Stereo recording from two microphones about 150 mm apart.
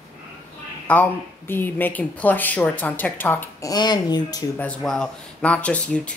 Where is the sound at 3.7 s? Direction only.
30° left (ahead or behind).